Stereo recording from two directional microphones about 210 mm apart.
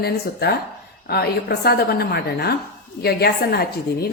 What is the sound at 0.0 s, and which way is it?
A woman's voice, 50° left (ahead or behind).